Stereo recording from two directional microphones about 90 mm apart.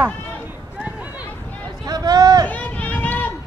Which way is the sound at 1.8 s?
50° right (ahead or behind).